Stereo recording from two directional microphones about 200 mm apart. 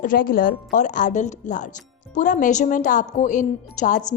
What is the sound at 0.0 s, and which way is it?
A woman's voice, 45° left (ahead or behind).